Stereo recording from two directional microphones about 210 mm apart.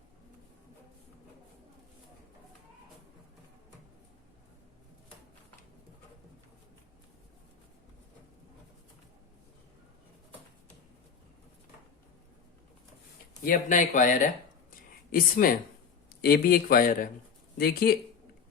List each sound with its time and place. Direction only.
13.4 s speech: 40° left (ahead or behind)
14.7 s a sound: 40° left (ahead or behind)
16.0 s speech: 50° left (ahead or behind)